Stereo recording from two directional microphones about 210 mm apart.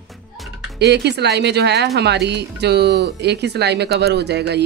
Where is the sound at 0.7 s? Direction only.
50° right (ahead or behind).